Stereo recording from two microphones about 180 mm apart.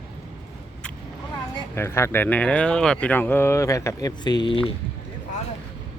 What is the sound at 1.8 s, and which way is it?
Speech, 15° left (ahead or behind).